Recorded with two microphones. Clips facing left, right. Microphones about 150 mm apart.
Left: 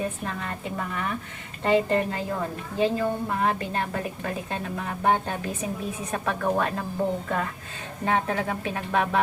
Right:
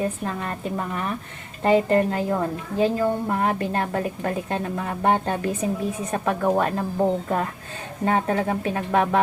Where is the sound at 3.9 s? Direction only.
40° right (ahead or behind).